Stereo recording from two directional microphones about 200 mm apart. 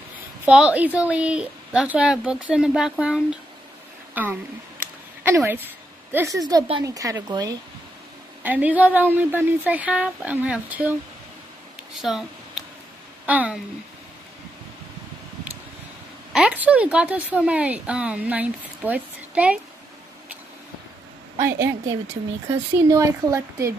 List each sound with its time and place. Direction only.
0.5 s a woman's voice: 5° right (ahead or behind)
4.1 s a sound: 10° right (ahead or behind)
6.1 s speech: 15° right (ahead or behind)
8.4 s speech: 10° right (ahead or behind)
12.0 s speech: centre (ahead or behind)
16.3 s speech: 5° right (ahead or behind)
22.5 s speech: 15° right (ahead or behind)